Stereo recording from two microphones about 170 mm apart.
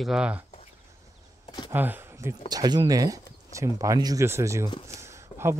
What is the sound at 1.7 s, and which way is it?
Speech, 10° right (ahead or behind).